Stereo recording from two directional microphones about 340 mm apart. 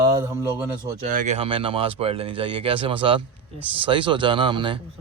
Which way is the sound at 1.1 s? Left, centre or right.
Right.